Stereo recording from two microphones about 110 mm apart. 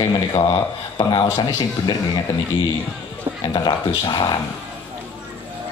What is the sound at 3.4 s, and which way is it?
Speech, 40° left (ahead or behind).